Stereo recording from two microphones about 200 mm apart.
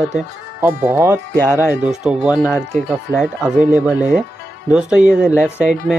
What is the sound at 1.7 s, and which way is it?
Speech, 5° right (ahead or behind).